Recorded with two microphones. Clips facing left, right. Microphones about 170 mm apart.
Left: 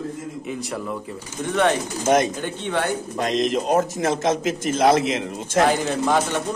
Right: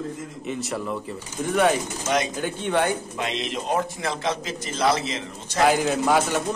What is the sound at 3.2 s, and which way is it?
A man's voice, 40° left (ahead or behind).